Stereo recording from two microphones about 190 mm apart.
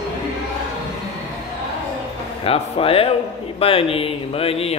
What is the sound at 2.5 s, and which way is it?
Speech, 30° left (ahead or behind).